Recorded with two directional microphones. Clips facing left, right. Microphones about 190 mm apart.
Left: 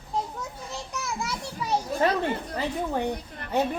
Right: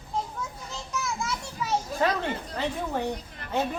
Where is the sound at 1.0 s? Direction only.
35° left (ahead or behind).